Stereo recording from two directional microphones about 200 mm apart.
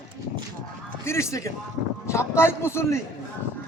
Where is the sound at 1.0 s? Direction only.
15° left (ahead or behind).